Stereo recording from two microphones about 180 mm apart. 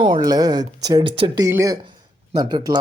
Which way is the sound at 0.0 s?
25° right (ahead or behind).